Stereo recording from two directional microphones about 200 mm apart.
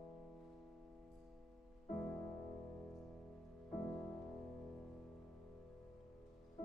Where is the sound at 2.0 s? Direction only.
5° left (ahead or behind).